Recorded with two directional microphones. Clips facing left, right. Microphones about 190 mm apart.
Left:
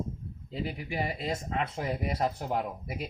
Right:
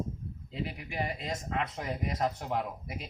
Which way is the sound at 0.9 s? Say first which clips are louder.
Left 4 dB; 35° left (ahead or behind).